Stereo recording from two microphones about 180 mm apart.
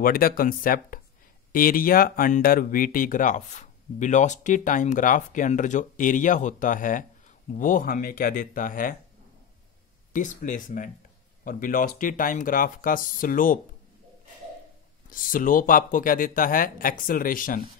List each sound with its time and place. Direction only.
0.0 s speech: 55° left (ahead or behind)
10.4 s speech: 50° left (ahead or behind)
15.0 s speech: 50° left (ahead or behind)